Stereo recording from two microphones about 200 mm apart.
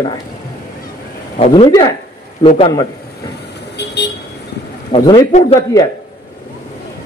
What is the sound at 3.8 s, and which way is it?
Vehicle, 55° left (ahead or behind).